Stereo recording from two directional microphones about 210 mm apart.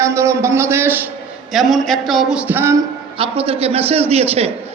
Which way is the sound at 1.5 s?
Centre (ahead or behind).